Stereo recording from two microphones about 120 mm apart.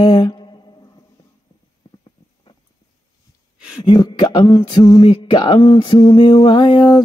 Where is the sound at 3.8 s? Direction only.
35° left (ahead or behind).